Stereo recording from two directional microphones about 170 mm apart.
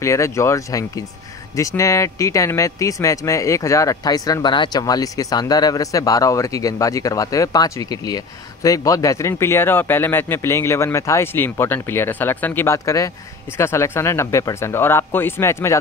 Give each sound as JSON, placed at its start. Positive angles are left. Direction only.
{"t": 0.0, "sound": "speech", "side_deg": 15}